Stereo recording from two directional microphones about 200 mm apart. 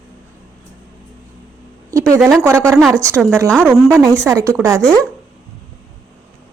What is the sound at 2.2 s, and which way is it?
Speech, 10° right (ahead or behind).